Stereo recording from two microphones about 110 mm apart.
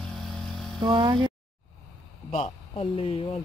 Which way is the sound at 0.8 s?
45° right (ahead or behind).